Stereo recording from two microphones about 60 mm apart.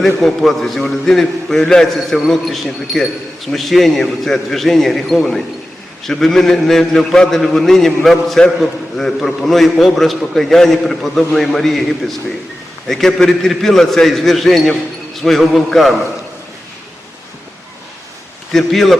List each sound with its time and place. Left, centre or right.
0.0 s a man's voice: centre
18.5 s a man's voice: centre